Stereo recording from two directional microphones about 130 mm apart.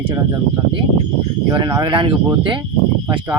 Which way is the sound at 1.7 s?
30° right (ahead or behind).